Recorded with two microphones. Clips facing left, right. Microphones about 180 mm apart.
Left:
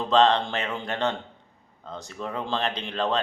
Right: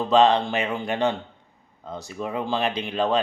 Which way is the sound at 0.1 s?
10° right (ahead or behind).